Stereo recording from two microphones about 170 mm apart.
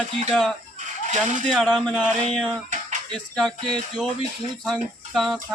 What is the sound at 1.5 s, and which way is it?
Speech, centre (ahead or behind).